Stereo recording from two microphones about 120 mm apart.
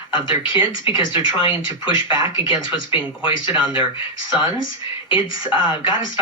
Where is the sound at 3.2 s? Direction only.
45° left (ahead or behind).